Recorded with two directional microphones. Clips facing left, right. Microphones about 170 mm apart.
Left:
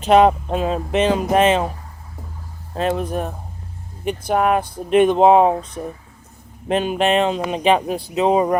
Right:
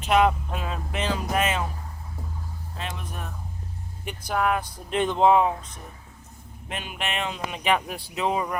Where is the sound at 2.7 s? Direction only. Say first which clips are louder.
Left 15 dB; 40° left (ahead or behind).